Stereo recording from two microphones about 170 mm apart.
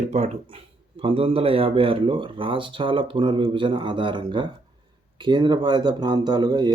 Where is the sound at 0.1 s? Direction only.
35° right (ahead or behind).